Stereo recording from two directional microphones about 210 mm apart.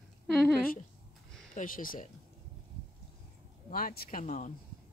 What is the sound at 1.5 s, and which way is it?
Speech, 40° left (ahead or behind).